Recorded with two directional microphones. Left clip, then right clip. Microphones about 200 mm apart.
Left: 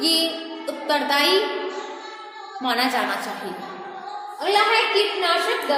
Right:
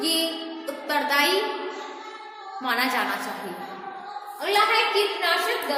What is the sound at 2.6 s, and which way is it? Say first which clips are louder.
Speech: left 2 dB; 10° left (ahead or behind).